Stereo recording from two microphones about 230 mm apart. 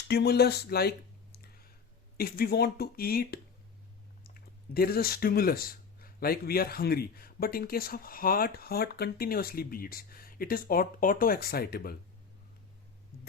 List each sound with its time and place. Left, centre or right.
0.1 s speech: left